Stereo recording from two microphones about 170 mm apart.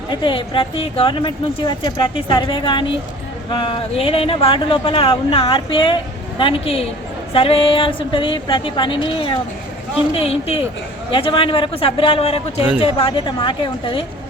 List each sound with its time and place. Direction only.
0.1 s speech: 30° left (ahead or behind)